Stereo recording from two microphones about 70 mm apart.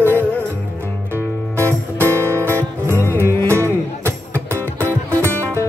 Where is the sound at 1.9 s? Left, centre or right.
Right.